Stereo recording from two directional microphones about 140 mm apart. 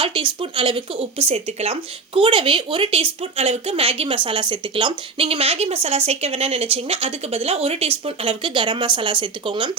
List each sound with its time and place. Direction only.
0.0 s speech: 40° right (ahead or behind)